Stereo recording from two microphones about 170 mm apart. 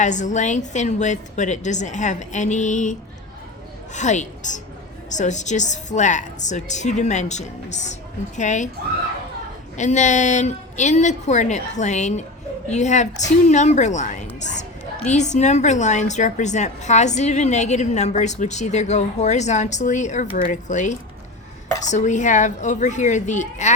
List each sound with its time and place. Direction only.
0.0 s a woman's voice: 45° left (ahead or behind)
9.7 s a woman's voice: 45° left (ahead or behind)